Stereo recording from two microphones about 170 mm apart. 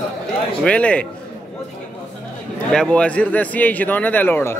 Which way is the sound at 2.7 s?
5° left (ahead or behind).